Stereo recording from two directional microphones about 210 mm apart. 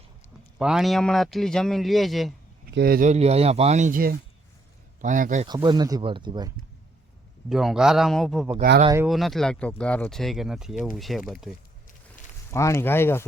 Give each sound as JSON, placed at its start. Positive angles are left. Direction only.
{"t": 0.6, "sound": "a man's voice", "side_deg": 0}
{"t": 2.7, "sound": "speech", "side_deg": -45}
{"t": 5.5, "sound": "speech", "side_deg": -20}
{"t": 7.5, "sound": "a man's voice", "side_deg": 0}
{"t": 12.5, "sound": "speech", "side_deg": 15}